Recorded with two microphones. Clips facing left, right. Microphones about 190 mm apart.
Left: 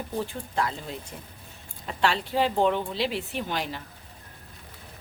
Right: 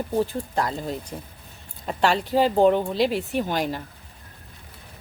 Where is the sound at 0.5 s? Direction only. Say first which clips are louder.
Even; 40° right (ahead or behind).